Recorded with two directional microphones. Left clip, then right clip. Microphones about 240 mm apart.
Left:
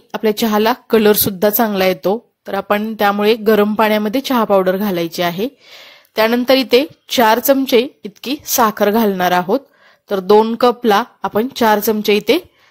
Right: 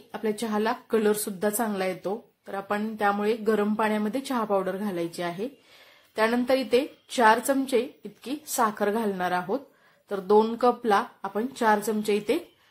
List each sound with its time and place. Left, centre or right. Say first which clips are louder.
0.1 s a woman's voice: left 13 dB; left